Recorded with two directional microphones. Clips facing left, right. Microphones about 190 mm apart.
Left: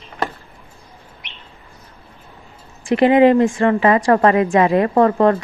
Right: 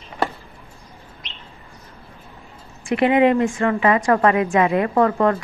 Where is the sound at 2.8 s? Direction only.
35° left (ahead or behind).